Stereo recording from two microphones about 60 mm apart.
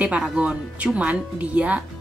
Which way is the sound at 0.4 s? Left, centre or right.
Right.